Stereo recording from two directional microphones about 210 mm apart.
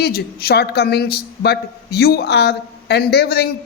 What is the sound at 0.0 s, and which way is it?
A woman's voice, 45° left (ahead or behind).